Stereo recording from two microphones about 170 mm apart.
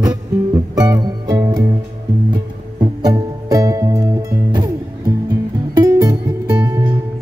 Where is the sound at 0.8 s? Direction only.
20° right (ahead or behind).